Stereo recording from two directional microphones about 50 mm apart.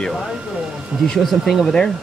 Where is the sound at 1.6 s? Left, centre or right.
Centre.